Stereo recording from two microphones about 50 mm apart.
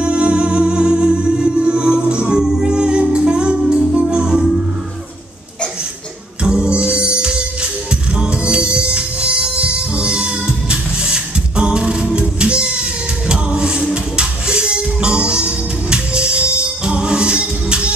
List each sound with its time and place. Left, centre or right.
0.0 s music: right
6.4 s music: centre